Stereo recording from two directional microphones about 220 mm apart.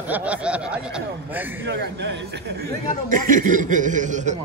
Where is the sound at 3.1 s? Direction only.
35° right (ahead or behind).